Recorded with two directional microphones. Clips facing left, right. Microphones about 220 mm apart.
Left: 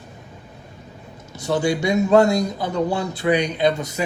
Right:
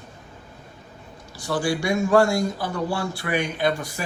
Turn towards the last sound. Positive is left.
turn(degrees=20)  # may be behind; listen again after turning